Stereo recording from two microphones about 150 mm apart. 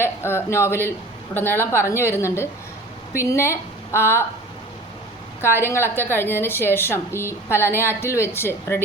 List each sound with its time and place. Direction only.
0.0 s a woman's voice: 15° left (ahead or behind)
5.4 s a woman's voice: 15° left (ahead or behind)